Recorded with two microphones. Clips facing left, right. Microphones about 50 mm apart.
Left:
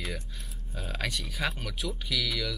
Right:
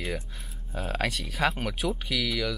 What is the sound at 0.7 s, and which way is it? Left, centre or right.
Cattle, right.